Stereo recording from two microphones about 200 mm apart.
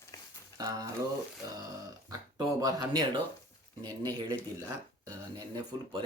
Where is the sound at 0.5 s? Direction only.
20° right (ahead or behind).